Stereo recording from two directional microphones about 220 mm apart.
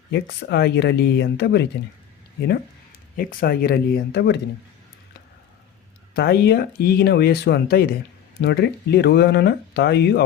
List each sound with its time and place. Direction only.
0.1 s speech: 50° left (ahead or behind)
3.2 s speech: 40° left (ahead or behind)
6.1 s speech: 45° left (ahead or behind)